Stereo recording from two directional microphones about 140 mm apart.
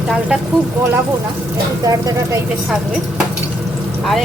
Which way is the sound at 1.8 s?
25° right (ahead or behind).